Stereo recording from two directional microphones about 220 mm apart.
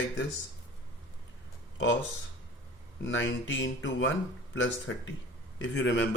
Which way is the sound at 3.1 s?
60° left (ahead or behind).